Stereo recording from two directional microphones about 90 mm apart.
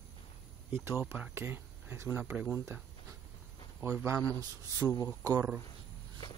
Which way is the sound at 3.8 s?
30° right (ahead or behind).